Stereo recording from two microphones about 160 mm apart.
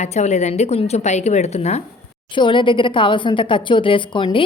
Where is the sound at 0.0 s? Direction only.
45° left (ahead or behind).